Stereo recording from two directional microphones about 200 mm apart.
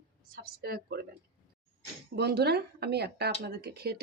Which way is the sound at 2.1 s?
55° right (ahead or behind).